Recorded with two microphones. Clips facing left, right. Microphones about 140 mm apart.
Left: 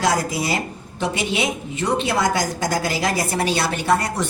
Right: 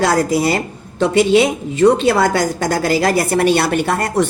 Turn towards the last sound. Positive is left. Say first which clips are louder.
# right 4 dB
turn(degrees=-55)  # may be behind; listen again after turning